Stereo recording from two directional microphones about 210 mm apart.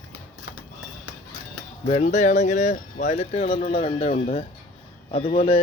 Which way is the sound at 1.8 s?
30° left (ahead or behind).